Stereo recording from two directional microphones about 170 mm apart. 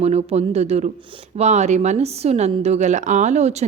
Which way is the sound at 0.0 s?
40° right (ahead or behind).